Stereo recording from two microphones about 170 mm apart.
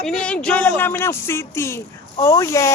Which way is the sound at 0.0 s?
5° left (ahead or behind).